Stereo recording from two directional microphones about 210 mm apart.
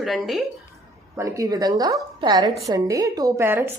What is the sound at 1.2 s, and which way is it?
A woman's voice, 15° right (ahead or behind).